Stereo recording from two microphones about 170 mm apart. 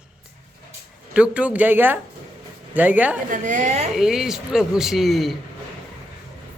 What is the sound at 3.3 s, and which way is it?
Speech, 45° right (ahead or behind).